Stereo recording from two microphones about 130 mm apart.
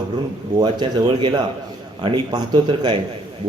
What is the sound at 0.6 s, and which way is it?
A man's voice, 35° right (ahead or behind).